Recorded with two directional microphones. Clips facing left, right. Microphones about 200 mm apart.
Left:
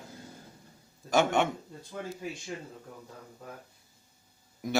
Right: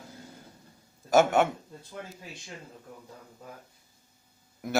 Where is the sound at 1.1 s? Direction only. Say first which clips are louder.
Right 4 dB; 5° right (ahead or behind).